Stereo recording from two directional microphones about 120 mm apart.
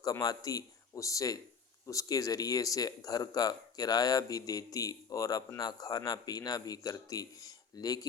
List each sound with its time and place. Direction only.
0.0 s speech: 30° left (ahead or behind)